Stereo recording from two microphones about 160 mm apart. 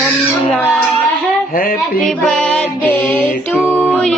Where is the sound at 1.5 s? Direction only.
65° left (ahead or behind).